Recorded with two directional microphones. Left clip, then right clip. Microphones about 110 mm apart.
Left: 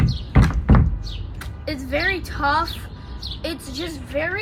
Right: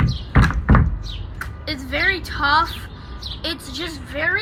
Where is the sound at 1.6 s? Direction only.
60° left (ahead or behind).